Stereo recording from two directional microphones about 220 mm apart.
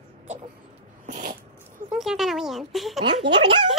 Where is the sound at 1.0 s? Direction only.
35° right (ahead or behind).